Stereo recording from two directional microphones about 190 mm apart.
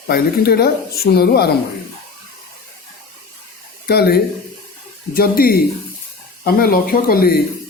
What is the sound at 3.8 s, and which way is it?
Speech, 55° left (ahead or behind).